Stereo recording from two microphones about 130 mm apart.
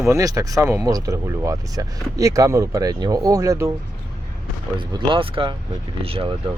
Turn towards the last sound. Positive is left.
turn(degrees=-45)  # may be behind; listen again after turning